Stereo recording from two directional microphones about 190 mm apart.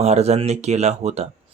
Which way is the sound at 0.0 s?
35° right (ahead or behind).